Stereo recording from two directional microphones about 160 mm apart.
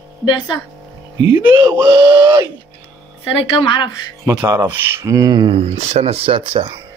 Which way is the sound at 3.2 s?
30° left (ahead or behind).